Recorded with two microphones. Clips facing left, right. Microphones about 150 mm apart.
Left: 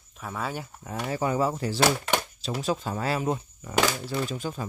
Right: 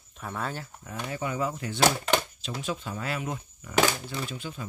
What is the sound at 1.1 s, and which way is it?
Speech, 35° left (ahead or behind).